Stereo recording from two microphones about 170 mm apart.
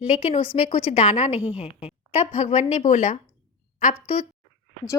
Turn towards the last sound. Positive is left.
turn(degrees=40)  # may be behind; listen again after turning